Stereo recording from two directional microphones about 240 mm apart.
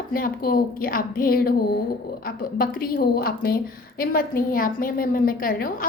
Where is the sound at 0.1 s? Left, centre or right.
Left.